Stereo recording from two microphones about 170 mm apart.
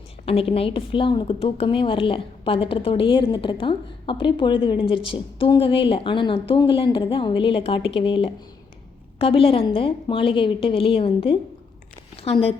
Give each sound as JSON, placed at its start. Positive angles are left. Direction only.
{"t": 0.3, "sound": "a woman's voice", "side_deg": 35}